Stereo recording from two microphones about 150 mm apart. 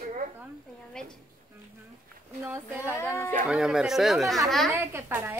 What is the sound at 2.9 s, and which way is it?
Speech, 15° left (ahead or behind).